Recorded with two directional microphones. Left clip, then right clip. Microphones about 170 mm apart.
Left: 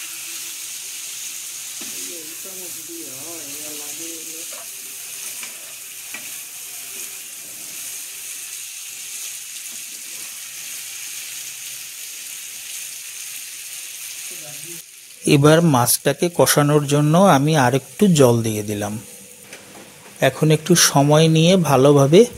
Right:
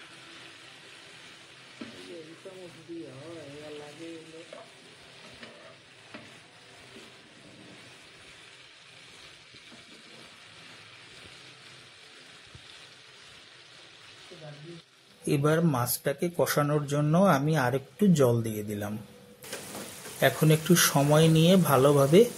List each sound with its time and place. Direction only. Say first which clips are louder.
15.2 s speech: left 12 dB; 75° right (ahead or behind)
20.2 s speech: left 7 dB; 90° right